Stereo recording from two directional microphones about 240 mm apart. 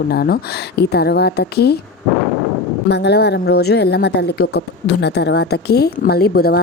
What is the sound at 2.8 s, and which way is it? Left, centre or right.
A woman's voice, left.